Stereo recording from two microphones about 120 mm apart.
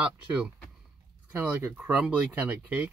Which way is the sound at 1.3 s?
10° right (ahead or behind).